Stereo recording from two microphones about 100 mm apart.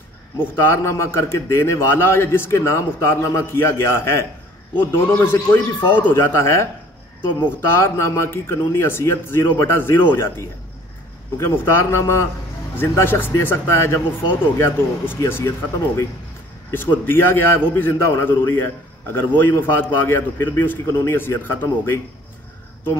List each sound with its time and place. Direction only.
0.4 s a man's voice: 30° left (ahead or behind)
7.7 s a man's voice: 30° left (ahead or behind)
11.3 s a man's voice: 25° left (ahead or behind)
16.7 s a man's voice: 20° left (ahead or behind)